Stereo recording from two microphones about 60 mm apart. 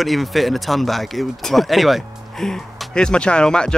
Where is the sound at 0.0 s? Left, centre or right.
Centre.